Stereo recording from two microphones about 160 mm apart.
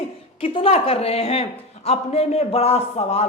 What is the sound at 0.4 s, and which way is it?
A man's voice, 35° left (ahead or behind).